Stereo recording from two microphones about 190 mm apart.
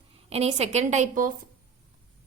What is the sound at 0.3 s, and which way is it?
Speech, 35° right (ahead or behind).